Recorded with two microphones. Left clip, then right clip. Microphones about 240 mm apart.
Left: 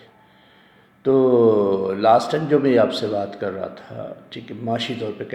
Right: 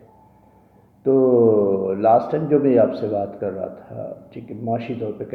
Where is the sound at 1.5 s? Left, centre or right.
Left.